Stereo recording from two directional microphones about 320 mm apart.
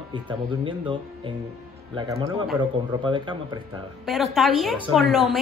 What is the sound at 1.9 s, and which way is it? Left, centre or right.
Speech, centre.